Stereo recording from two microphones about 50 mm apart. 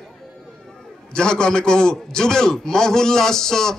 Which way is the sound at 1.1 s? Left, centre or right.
Centre.